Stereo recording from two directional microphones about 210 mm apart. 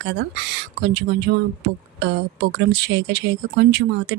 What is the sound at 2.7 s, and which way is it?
Speech, 55° right (ahead or behind).